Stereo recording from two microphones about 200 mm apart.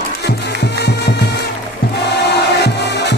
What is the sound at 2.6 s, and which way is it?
Music, 55° left (ahead or behind).